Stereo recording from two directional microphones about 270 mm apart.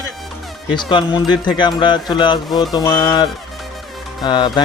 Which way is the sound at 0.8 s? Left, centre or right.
Centre.